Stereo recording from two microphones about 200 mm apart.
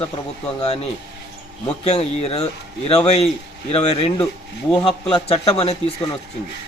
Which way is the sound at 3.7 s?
30° left (ahead or behind).